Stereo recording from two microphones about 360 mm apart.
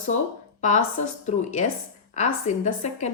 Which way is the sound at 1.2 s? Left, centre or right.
Centre.